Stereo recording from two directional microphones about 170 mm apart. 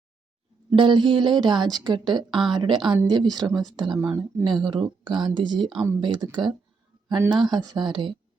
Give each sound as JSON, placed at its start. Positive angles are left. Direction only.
{"t": 0.8, "sound": "speech", "side_deg": -30}
{"t": 2.3, "sound": "speech", "side_deg": 0}
{"t": 2.6, "sound": "speech", "side_deg": -25}